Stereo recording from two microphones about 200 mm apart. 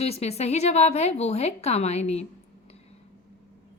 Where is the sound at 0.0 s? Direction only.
30° left (ahead or behind).